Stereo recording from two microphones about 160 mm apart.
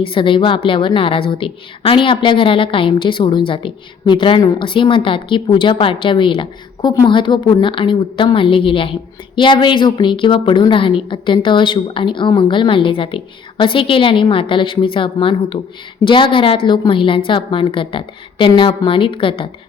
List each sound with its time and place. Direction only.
0.0 s a woman's voice: 30° left (ahead or behind)